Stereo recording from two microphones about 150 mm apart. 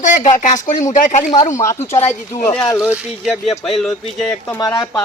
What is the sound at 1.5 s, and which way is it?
Speech, 20° left (ahead or behind).